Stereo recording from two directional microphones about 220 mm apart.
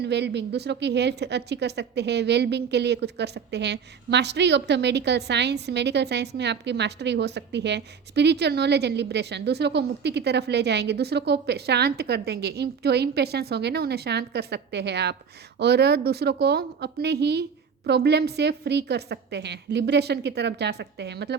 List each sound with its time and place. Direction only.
0.0 s a woman's voice: 50° right (ahead or behind)